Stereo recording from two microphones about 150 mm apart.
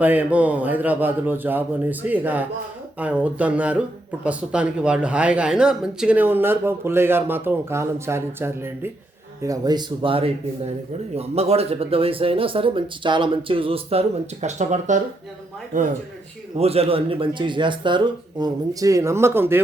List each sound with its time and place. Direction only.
0.0 s speech: 10° right (ahead or behind); by 15.9 s 60° right (ahead or behind)
16.6 s speech: 40° right (ahead or behind); by 19.6 s 15° right (ahead or behind)